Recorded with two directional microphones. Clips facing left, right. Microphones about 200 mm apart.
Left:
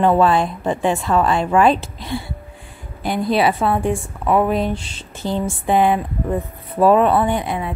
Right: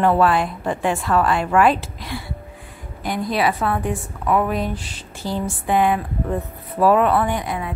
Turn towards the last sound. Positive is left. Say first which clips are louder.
# left 3 dB
turn(degrees=25)  # may be behind; listen again after turning